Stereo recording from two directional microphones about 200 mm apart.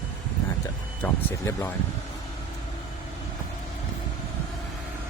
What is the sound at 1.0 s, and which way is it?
Speech, 10° left (ahead or behind).